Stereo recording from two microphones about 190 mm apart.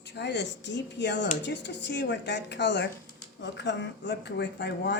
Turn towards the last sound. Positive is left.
turn(degrees=60)  # may be behind; listen again after turning